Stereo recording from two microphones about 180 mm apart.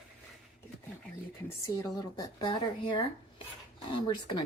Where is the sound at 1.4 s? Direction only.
20° left (ahead or behind).